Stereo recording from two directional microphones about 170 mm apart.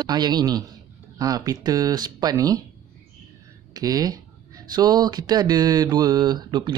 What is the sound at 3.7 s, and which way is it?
Speech, 20° right (ahead or behind).